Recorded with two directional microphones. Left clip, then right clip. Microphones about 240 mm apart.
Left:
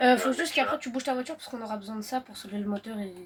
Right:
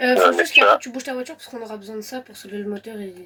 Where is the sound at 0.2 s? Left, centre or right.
Right.